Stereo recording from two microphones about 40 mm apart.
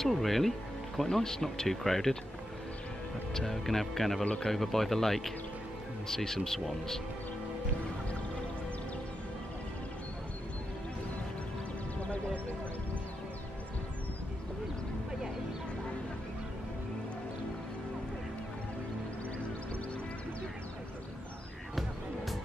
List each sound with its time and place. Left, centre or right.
0.0 s speech: centre
3.3 s speech: centre
4.2 s speech: left
4.5 s speech: centre
12.0 s music: left